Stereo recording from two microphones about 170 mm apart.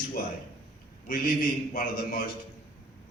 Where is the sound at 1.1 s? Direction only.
55° left (ahead or behind).